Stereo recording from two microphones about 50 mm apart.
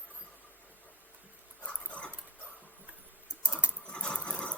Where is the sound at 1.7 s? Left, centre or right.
Left.